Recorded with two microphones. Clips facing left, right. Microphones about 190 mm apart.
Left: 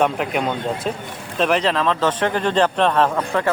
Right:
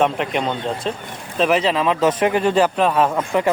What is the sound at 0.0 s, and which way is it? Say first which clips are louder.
A man's voice: even; 5° left (ahead or behind).